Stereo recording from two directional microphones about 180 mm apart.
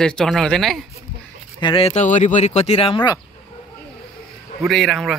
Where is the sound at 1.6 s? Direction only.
30° left (ahead or behind).